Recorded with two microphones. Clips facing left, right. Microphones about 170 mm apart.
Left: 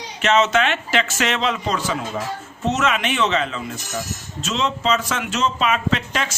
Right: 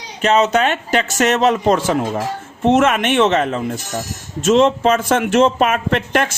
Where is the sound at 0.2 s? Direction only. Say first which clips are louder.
Right 3 dB; 35° right (ahead or behind).